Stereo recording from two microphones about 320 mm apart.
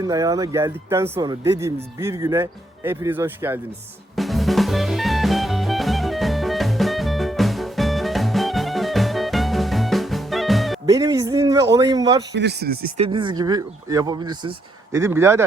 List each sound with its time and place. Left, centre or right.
0.0 s speech: centre
4.1 s music: centre
10.8 s speech: centre
12.3 s speech: right
13.1 s speech: centre